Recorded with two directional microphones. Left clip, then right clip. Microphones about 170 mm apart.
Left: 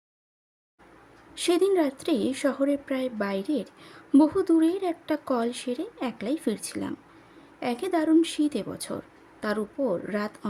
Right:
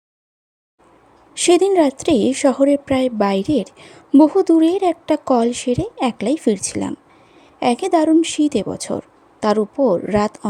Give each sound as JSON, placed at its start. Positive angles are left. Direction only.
{"t": 1.4, "sound": "speech", "side_deg": -35}